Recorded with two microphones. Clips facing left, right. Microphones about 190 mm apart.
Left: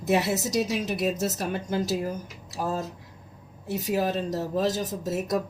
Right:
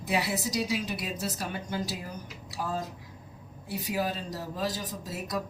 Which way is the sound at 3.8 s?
45° left (ahead or behind).